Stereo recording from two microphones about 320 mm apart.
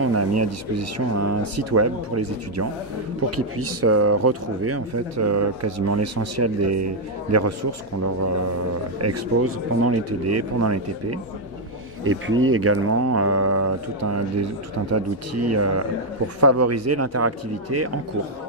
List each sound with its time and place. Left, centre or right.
0.0 s speech: right
9.0 s speech: right
12.0 s speech: right